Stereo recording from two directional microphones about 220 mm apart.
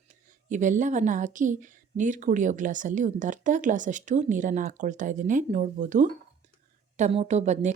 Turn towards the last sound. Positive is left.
turn(degrees=-30)  # may be behind; listen again after turning